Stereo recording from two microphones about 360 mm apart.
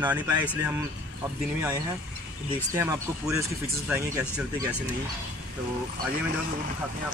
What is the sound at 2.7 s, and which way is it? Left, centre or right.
Speech, centre.